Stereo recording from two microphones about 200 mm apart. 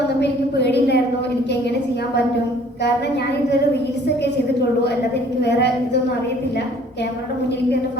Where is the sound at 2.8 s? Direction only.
55° left (ahead or behind).